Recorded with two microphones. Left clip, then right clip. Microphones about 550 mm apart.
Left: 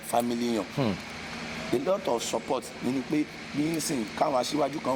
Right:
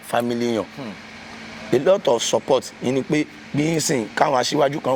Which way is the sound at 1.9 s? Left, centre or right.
Right.